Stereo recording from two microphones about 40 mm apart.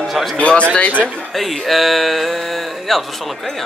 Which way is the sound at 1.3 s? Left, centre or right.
Centre.